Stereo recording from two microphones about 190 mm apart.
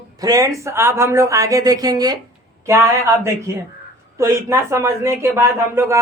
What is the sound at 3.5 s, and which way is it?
Speech, 15° right (ahead or behind).